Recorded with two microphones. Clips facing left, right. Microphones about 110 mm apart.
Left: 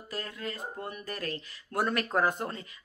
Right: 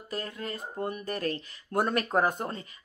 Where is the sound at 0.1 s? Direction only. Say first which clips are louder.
Right 2 dB; 30° right (ahead or behind).